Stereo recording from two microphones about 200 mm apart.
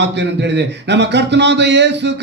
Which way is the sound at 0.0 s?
60° right (ahead or behind).